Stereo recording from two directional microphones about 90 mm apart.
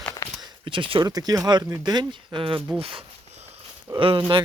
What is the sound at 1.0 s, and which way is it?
Speech, 45° right (ahead or behind).